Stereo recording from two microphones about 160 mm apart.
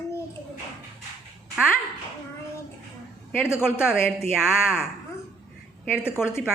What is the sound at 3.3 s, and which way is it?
Speech, 15° left (ahead or behind).